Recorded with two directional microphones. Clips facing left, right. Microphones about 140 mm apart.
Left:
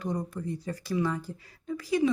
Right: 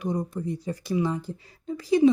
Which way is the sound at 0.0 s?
15° right (ahead or behind).